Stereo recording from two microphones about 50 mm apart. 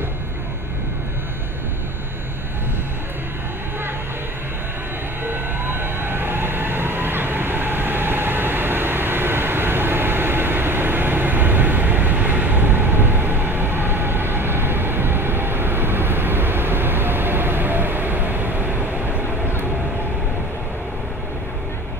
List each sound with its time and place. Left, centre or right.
5.2 s train: right